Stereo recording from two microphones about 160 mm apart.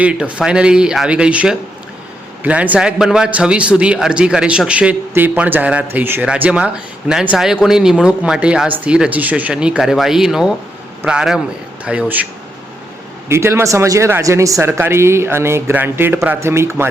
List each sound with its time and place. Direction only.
0.0 s a man's voice: 5° right (ahead or behind)